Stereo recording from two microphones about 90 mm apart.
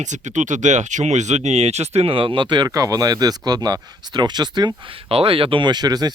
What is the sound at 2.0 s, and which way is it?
Speech, 80° right.